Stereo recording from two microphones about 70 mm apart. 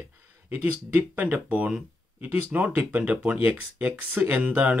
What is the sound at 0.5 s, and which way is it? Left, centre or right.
Speech, right.